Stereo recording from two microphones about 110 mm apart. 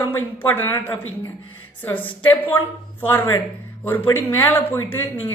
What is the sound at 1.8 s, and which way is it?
A woman's voice, 15° left (ahead or behind).